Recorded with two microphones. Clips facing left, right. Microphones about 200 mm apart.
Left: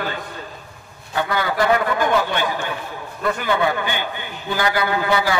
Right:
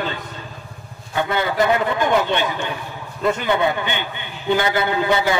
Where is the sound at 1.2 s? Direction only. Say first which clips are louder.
Right 1 dB; 25° right (ahead or behind).